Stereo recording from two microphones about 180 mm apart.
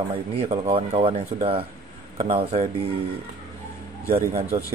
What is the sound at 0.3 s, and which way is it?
Speech, 30° right (ahead or behind).